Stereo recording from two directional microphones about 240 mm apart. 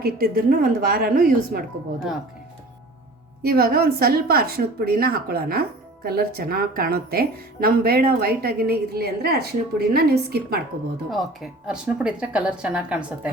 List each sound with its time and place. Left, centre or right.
0.0 s a woman's voice: right
3.4 s a woman's voice: right
11.1 s a woman's voice: centre